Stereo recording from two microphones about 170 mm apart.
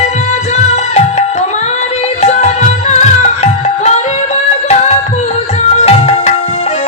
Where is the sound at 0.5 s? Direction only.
40° left (ahead or behind).